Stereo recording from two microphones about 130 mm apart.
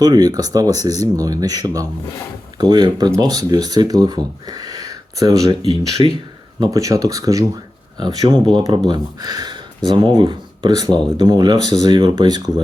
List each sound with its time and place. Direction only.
0.0 s speech: 30° right (ahead or behind)
6.6 s speech: 25° right (ahead or behind)